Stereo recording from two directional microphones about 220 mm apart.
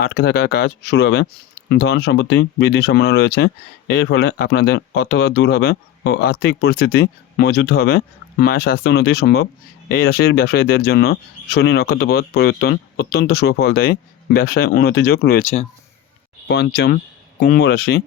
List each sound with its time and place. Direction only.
0.0 s speech: 45° left (ahead or behind)
16.7 s speech: 50° left (ahead or behind)